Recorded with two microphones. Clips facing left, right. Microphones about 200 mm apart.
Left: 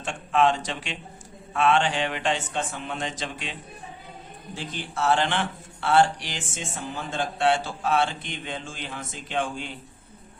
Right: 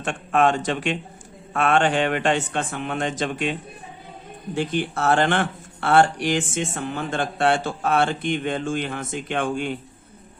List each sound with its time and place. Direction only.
0.0 s speech: 55° right (ahead or behind)